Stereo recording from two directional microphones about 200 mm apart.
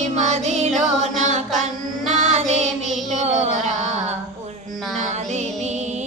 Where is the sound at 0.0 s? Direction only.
35° right (ahead or behind).